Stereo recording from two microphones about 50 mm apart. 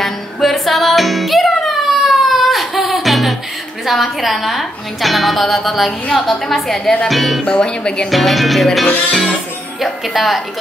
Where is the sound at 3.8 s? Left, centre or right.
Centre.